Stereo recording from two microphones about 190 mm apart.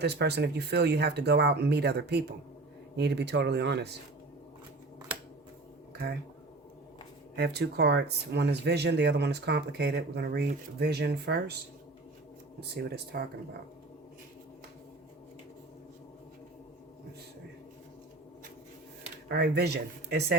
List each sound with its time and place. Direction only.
0.0 s speech: 60° right (ahead or behind)
5.9 s speech: 55° right (ahead or behind)
7.3 s speech: 60° right (ahead or behind)
12.5 s speech: 55° right (ahead or behind)
19.3 s speech: 60° right (ahead or behind)